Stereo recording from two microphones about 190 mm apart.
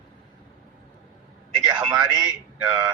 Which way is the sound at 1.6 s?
25° right (ahead or behind).